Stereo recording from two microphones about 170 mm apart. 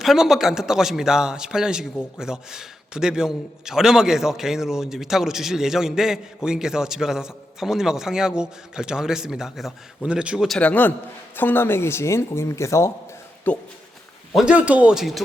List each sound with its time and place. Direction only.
0.0 s a man's voice: centre (ahead or behind)
14.3 s a man's voice: 5° right (ahead or behind)